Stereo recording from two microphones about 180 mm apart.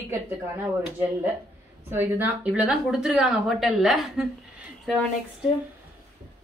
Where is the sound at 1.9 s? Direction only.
10° right (ahead or behind).